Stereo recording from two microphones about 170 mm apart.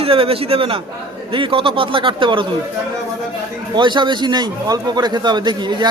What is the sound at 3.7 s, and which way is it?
A man's voice, 25° right (ahead or behind).